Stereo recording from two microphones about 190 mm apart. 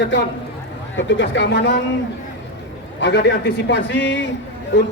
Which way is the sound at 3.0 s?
65° left (ahead or behind).